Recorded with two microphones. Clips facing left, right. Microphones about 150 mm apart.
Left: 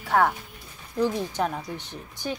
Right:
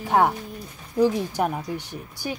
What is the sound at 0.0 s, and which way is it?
A woman's voice, 20° right (ahead or behind).